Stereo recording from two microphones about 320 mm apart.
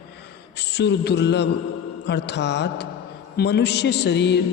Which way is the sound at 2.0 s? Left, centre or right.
Left.